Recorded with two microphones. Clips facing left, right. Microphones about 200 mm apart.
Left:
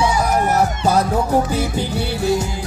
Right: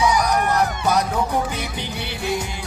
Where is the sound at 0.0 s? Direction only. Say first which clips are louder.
Left 2 dB; 25° left (ahead or behind).